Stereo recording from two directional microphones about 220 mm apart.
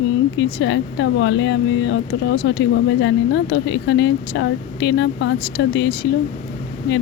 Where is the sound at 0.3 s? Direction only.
55° left (ahead or behind).